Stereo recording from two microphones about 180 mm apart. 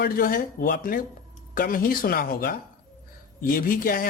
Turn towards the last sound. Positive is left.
turn(degrees=50)  # may be behind; listen again after turning